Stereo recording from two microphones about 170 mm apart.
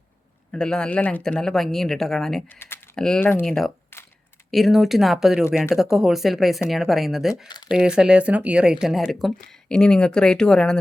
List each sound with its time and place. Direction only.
0.5 s speech: 5° left (ahead or behind)
2.6 s typing: 15° left (ahead or behind)
2.9 s speech: 5° left (ahead or behind)
3.9 s a sound: 15° left (ahead or behind)
4.5 s speech: centre (ahead or behind)
7.4 s speech: 25° left (ahead or behind)
7.7 s speech: 5° right (ahead or behind)